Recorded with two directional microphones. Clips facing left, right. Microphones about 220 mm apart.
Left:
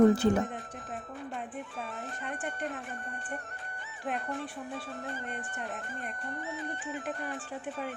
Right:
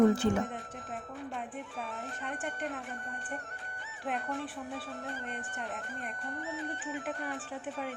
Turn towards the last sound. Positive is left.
turn(degrees=0)  # may be behind; listen again after turning